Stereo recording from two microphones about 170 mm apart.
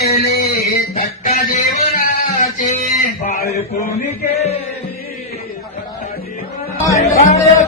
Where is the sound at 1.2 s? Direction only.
55° left (ahead or behind).